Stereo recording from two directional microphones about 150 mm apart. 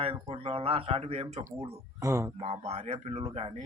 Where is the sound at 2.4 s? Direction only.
45° right (ahead or behind).